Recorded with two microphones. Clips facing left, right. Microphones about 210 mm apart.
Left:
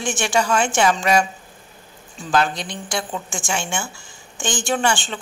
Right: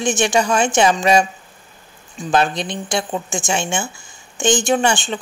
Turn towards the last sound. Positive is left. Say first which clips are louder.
# right 4 dB
turn(degrees=-20)  # may be behind; listen again after turning